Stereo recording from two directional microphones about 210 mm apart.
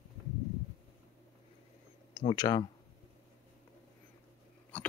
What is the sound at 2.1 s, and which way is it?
Speech, 25° left (ahead or behind).